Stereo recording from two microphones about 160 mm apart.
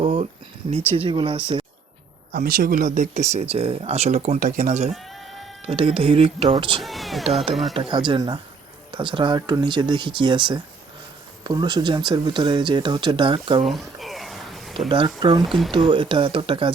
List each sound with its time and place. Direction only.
0.0 s a sound: 35° right (ahead or behind)
0.9 s speech: 35° right (ahead or behind)
2.3 s speech: 65° right (ahead or behind); by 4.9 s 45° right (ahead or behind)
5.0 s music: centre (ahead or behind)
5.6 s speech: 35° right (ahead or behind)
6.8 s speech: centre (ahead or behind)
7.7 s speech: 30° right (ahead or behind)
13.7 s a sound: centre (ahead or behind)
14.8 s speech: 30° right (ahead or behind)
15.4 s speech: centre (ahead or behind)
15.9 s speech: 30° right (ahead or behind)